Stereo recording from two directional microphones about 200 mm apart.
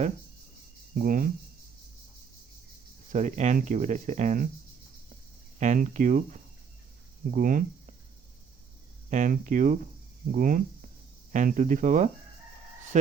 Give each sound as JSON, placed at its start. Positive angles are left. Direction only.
{"t": 0.9, "sound": "speech", "side_deg": -45}
{"t": 3.1, "sound": "speech", "side_deg": -35}
{"t": 5.5, "sound": "speech", "side_deg": -40}
{"t": 9.0, "sound": "speech", "side_deg": -40}